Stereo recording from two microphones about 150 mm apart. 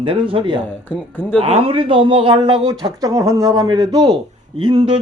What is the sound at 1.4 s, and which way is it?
Speech, 40° right (ahead or behind).